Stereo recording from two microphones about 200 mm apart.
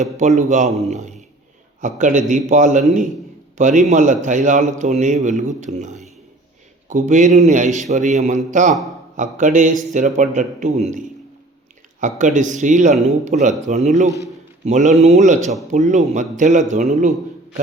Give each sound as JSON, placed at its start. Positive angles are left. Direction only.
{"t": 0.0, "sound": "a man's voice", "side_deg": -35}